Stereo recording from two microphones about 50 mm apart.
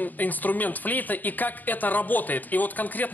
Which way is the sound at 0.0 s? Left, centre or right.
Left.